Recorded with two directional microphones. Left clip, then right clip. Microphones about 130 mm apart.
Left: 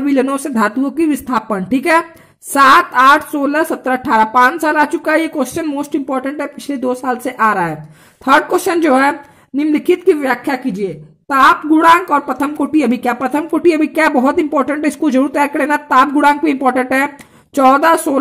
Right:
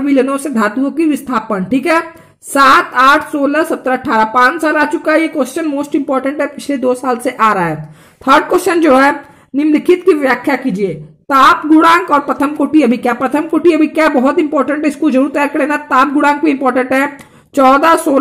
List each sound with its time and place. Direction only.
0.0 s a woman's voice: 45° left (ahead or behind); by 18.2 s 25° left (ahead or behind)